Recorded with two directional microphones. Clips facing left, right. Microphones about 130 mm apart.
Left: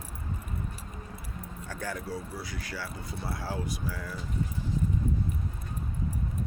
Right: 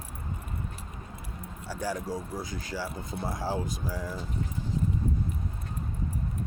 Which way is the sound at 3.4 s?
40° right (ahead or behind).